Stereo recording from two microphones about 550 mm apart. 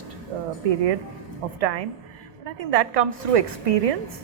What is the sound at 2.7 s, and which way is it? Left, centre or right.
A woman's voice, right.